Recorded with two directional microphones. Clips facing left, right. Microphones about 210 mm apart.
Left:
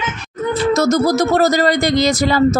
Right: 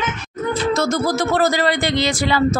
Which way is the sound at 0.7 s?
40° left (ahead or behind).